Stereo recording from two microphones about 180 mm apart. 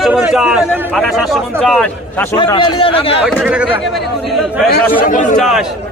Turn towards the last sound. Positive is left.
turn(degrees=40)  # may be behind; listen again after turning